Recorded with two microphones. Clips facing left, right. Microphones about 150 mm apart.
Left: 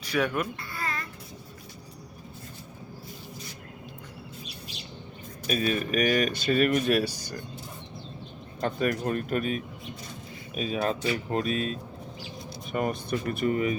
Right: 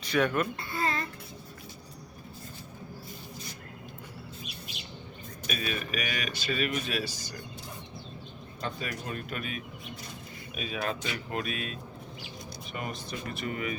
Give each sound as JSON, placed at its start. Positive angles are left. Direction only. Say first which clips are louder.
{"t": 0.0, "sound": "speech", "louder": "even", "side_deg": 10}
{"t": 0.7, "sound": "a sound", "louder": "right 3 dB", "side_deg": -25}
{"t": 4.4, "sound": "bird", "louder": "left 1 dB", "side_deg": 35}
{"t": 5.5, "sound": "speech", "louder": "left 7 dB", "side_deg": 40}
{"t": 8.6, "sound": "speech", "louder": "left 9 dB", "side_deg": 50}
{"t": 12.7, "sound": "speech", "louder": "left 9 dB", "side_deg": 50}
{"t": 13.5, "sound": "speech", "louder": "left 8 dB", "side_deg": 35}